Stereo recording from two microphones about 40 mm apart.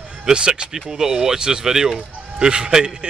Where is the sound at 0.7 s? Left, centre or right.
Centre.